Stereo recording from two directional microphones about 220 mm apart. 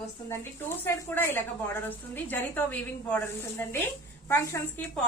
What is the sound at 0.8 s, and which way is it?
A woman's voice, 10° left (ahead or behind).